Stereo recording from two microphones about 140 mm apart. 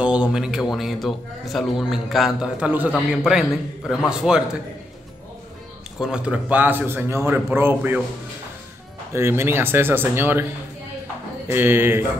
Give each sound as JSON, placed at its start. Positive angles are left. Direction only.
{"t": 0.0, "sound": "a man's voice", "side_deg": -5}
{"t": 5.9, "sound": "speech", "side_deg": -5}
{"t": 9.1, "sound": "speech", "side_deg": -15}
{"t": 11.4, "sound": "speech", "side_deg": -15}